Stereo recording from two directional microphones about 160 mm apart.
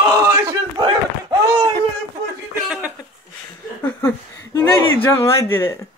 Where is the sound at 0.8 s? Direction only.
30° right (ahead or behind).